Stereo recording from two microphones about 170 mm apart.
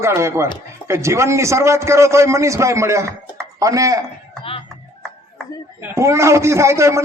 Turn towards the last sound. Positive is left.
turn(degrees=-15)  # may be behind; listen again after turning